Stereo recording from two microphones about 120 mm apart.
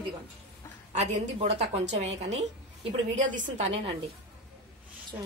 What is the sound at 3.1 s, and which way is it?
Speech, 90° right.